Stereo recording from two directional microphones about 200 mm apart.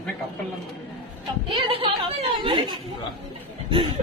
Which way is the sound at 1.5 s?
25° right (ahead or behind).